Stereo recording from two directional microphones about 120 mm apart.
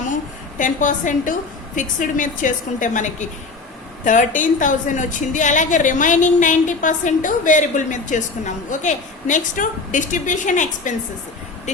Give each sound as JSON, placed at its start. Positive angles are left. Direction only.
{"t": 0.6, "sound": "a woman's voice", "side_deg": 90}